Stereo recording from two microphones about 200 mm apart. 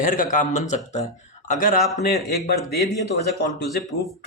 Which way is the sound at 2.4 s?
55° left (ahead or behind).